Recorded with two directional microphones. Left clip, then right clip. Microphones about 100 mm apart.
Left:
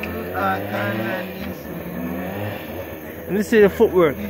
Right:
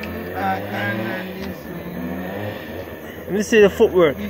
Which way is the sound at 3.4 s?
15° left (ahead or behind).